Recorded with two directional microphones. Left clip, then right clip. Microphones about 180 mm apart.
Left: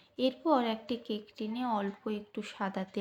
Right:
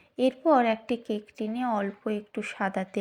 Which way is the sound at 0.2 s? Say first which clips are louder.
Right 7 dB; 30° right (ahead or behind).